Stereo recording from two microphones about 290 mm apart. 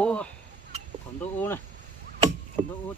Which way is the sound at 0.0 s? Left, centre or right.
Centre.